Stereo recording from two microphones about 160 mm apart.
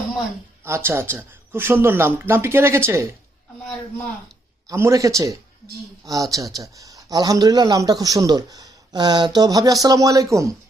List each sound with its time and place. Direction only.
0.6 s speech: 15° right (ahead or behind)
4.7 s speech: 20° right (ahead or behind)